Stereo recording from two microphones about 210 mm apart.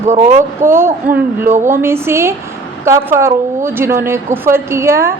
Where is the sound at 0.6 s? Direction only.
10° right (ahead or behind).